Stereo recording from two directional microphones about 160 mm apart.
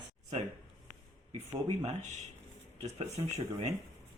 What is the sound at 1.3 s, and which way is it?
Speech, 40° right (ahead or behind).